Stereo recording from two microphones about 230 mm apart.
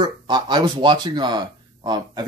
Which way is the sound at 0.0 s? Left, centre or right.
Centre.